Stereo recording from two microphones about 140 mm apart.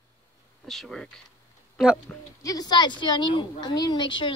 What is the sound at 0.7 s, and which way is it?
Speech, 5° left (ahead or behind).